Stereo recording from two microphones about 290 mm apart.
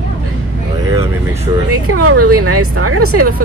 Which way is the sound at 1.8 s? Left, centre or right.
Right.